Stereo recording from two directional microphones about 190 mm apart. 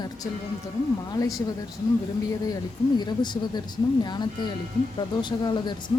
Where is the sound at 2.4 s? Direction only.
20° left (ahead or behind).